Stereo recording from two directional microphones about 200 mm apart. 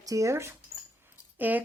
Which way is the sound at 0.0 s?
15° right (ahead or behind).